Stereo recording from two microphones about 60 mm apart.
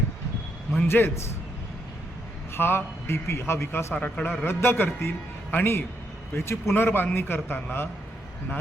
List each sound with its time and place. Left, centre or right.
0.9 s a man's voice: left
2.6 s a man's voice: left
3.9 s speech: left
4.4 s a man's voice: left